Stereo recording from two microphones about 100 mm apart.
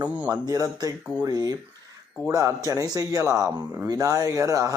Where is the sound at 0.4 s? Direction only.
35° right (ahead or behind).